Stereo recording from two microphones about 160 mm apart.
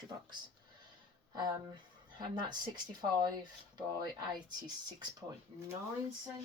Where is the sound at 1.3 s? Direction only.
25° right (ahead or behind).